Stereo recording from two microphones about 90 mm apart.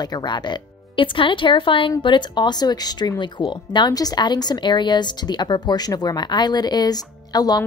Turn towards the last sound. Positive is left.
turn(degrees=45)  # may be behind; listen again after turning